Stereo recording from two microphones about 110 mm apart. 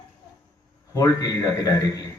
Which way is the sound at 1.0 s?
30° left (ahead or behind).